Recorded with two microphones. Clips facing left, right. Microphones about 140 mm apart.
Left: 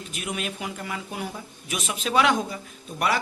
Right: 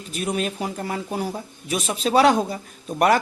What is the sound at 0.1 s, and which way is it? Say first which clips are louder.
Speech: right 7 dB; 35° right (ahead or behind).